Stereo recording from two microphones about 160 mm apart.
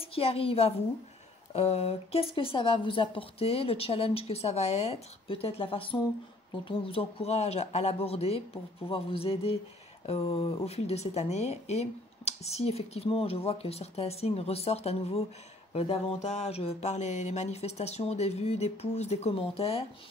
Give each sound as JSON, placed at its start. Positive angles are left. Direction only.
{"t": 0.0, "sound": "a woman's voice", "side_deg": 35}